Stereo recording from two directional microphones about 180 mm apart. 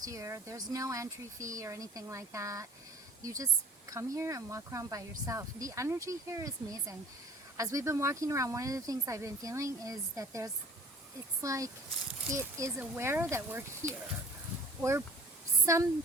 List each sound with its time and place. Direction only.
0.0 s speech: 15° right (ahead or behind)